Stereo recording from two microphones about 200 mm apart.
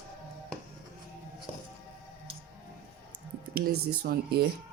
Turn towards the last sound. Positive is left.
turn(degrees=-50)  # may be behind; listen again after turning